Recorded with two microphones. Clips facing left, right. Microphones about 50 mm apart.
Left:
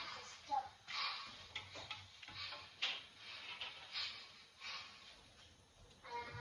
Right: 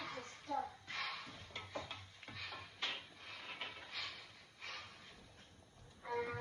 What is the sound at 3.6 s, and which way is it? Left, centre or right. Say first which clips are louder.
Train: right 2 dB; right.